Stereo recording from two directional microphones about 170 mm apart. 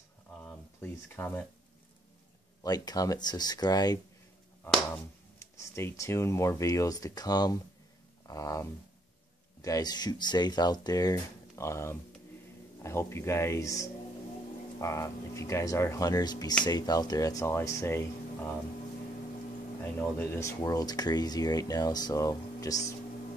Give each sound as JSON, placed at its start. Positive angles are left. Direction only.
{"t": 0.4, "sound": "a sound", "side_deg": 10}
{"t": 2.6, "sound": "speech", "side_deg": 25}
{"t": 5.4, "sound": "speech", "side_deg": 15}
{"t": 19.8, "sound": "speech", "side_deg": 10}